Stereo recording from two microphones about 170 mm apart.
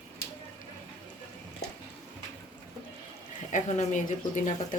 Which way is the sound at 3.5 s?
45° left (ahead or behind).